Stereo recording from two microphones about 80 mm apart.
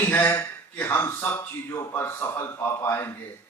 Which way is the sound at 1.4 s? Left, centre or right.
Left.